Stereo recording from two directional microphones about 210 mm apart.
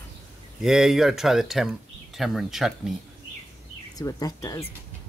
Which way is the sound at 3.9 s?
15° left (ahead or behind).